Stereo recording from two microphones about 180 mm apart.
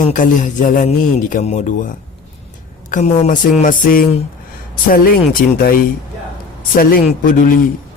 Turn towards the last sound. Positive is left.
turn(degrees=50)  # may be behind; listen again after turning